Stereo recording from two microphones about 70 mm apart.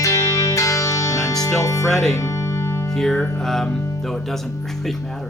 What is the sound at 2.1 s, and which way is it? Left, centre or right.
Music, left.